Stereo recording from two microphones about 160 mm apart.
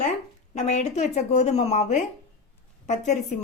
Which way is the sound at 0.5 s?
45° left (ahead or behind).